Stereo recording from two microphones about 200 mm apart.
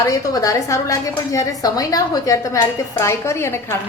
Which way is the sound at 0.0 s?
15° left (ahead or behind).